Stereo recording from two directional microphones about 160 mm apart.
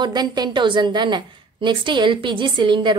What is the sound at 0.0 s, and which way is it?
A woman's voice, 25° right (ahead or behind).